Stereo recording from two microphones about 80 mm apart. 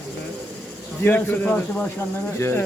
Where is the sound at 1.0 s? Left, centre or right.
Left.